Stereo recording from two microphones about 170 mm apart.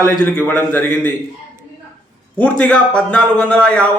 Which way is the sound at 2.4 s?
10° left (ahead or behind).